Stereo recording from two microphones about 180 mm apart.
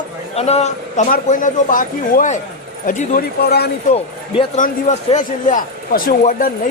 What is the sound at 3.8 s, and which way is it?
A man's voice, 40° left (ahead or behind).